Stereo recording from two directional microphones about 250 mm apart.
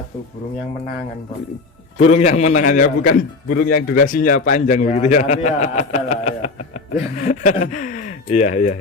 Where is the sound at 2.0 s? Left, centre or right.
Left.